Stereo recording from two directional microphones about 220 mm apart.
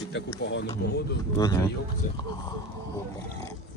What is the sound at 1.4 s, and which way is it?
Speech, 15° left (ahead or behind).